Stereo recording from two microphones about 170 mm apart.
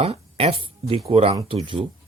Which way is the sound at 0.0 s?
35° right (ahead or behind).